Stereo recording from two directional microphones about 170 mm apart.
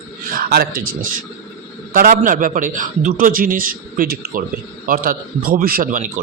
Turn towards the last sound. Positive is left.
turn(degrees=-55)  # may be behind; listen again after turning